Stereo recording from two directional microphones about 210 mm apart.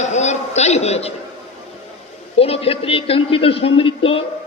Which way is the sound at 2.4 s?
30° left (ahead or behind).